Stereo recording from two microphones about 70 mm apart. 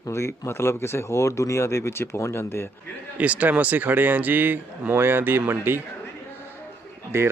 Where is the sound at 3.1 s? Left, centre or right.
Right.